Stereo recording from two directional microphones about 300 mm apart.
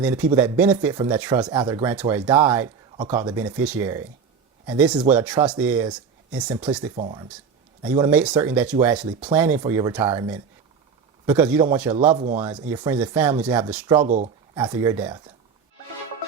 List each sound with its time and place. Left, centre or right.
0.0 s a man's voice: centre
11.9 s speech: centre
12.4 s speech: centre
13.7 s a man's voice: centre
13.9 s speech: centre